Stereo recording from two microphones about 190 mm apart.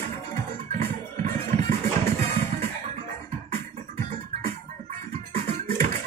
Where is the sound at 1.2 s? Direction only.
35° right (ahead or behind).